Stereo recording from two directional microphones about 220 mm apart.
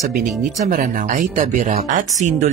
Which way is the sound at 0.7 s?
35° right (ahead or behind).